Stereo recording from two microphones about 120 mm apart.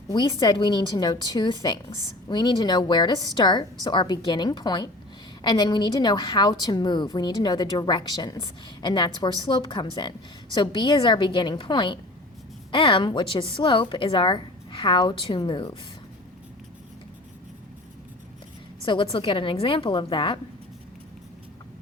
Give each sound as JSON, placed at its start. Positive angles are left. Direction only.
{"t": 0.1, "sound": "a woman's voice", "side_deg": 35}
{"t": 18.8, "sound": "a woman's voice", "side_deg": 45}